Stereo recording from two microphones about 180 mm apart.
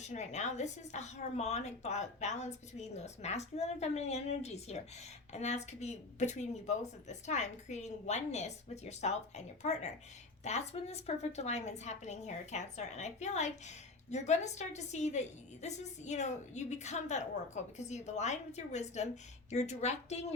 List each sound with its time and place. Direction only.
0.0 s a woman's voice: 40° left (ahead or behind)